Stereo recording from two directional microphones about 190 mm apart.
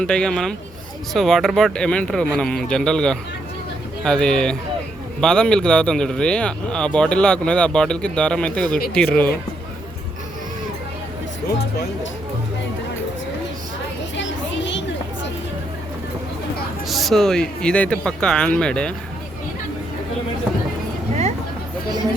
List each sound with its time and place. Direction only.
0.0 s speech: 5° left (ahead or behind)
14.2 s a sound: 70° left (ahead or behind)
16.9 s speech: centre (ahead or behind)